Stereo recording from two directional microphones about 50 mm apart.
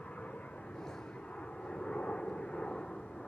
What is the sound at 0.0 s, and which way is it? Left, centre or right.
Vehicle, left.